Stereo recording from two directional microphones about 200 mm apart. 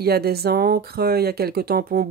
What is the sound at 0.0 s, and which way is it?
Speech, 50° right (ahead or behind).